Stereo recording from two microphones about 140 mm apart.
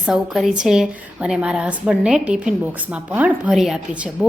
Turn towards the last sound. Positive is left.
turn(degrees=-5)  # may be behind; listen again after turning